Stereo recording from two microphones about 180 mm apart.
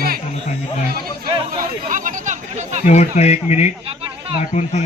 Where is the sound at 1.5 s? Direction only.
45° right (ahead or behind).